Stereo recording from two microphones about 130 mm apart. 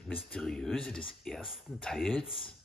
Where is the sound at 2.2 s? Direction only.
45° left (ahead or behind).